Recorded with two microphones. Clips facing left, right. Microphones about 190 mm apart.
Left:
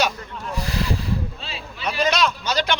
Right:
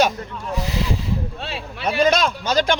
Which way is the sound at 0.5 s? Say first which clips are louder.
Right 3 dB; 20° right (ahead or behind).